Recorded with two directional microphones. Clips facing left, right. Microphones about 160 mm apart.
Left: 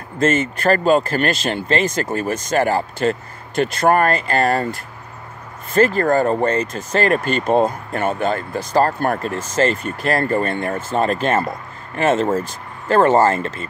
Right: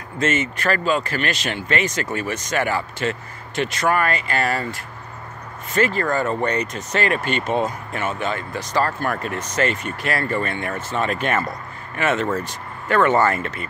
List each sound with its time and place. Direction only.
0.2 s speech: 35° left (ahead or behind)
3.5 s speech: 45° left (ahead or behind)
5.8 s speech: 45° left (ahead or behind)
7.6 s speech: 50° left (ahead or behind); by 13.5 s 30° left (ahead or behind)